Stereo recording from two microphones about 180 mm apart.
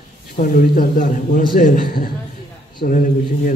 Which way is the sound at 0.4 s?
50° left (ahead or behind).